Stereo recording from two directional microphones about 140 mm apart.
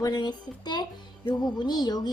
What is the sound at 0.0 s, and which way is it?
Speech, 30° left (ahead or behind).